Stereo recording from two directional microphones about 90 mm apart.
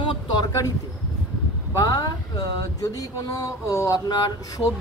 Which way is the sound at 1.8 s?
45° left (ahead or behind).